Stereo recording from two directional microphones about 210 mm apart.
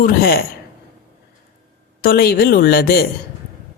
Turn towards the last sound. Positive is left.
turn(degrees=45)  # may be behind; listen again after turning